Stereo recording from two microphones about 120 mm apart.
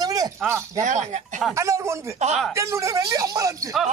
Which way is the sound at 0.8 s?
80° right.